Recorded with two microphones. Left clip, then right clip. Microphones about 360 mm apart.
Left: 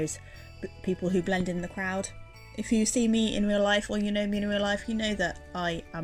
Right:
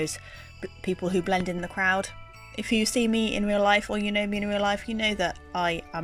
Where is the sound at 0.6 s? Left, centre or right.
Right.